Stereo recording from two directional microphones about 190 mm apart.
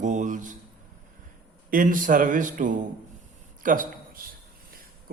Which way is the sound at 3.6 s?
45° right (ahead or behind).